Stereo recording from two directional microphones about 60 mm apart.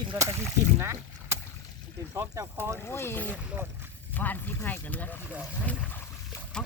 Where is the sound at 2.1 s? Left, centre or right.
Right.